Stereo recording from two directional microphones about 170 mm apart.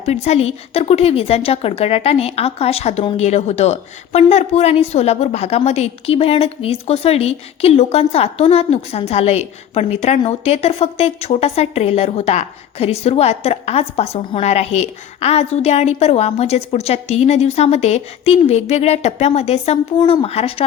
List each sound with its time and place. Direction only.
0.0 s a woman's voice: 40° left (ahead or behind)
20.0 s speech: 25° left (ahead or behind)
20.2 s a woman's voice: 35° left (ahead or behind)